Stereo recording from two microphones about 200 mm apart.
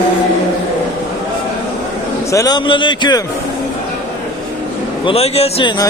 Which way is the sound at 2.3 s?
20° left (ahead or behind).